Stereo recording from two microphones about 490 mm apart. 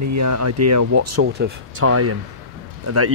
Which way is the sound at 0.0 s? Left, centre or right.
Right.